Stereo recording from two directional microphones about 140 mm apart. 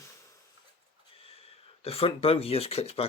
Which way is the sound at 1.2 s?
45° left (ahead or behind).